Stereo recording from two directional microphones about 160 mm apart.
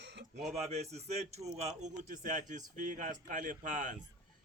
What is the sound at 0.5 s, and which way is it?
A man's voice, 45° right (ahead or behind).